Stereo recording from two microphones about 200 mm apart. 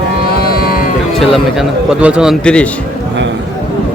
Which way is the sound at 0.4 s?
50° left (ahead or behind).